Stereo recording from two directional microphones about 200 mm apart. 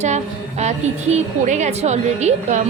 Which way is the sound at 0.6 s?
35° right (ahead or behind).